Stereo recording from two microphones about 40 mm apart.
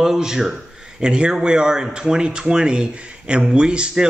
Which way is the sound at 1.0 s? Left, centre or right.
Right.